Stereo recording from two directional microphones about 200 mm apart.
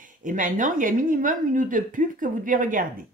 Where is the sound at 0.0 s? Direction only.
40° right (ahead or behind).